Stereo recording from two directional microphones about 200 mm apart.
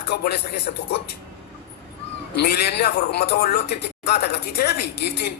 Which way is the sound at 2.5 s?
55° left (ahead or behind).